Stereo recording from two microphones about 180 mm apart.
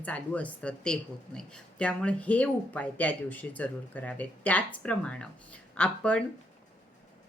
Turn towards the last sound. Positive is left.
turn(degrees=5)  # may be behind; listen again after turning